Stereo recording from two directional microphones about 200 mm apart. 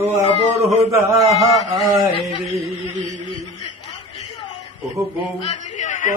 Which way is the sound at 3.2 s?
25° left (ahead or behind).